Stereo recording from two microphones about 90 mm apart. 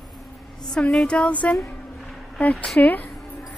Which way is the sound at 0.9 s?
10° left (ahead or behind).